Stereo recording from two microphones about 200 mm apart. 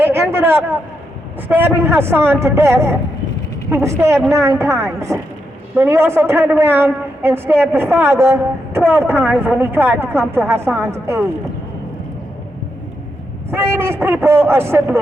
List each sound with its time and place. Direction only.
0.0 s a sound: 10° right (ahead or behind)
1.5 s a woman's voice: 10° right (ahead or behind)
13.5 s a woman's voice: 10° right (ahead or behind)